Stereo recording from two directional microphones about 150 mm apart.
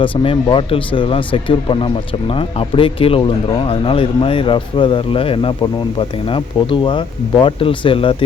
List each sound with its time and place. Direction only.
0.0 s speech: 35° left (ahead or behind)